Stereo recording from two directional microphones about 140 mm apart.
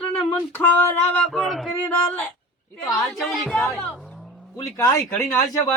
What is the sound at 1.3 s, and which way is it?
A man's voice, centre (ahead or behind).